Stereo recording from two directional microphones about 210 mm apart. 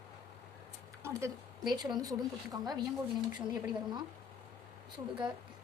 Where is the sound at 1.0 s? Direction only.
15° right (ahead or behind).